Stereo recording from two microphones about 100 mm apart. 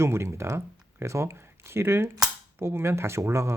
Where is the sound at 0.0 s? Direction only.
25° right (ahead or behind).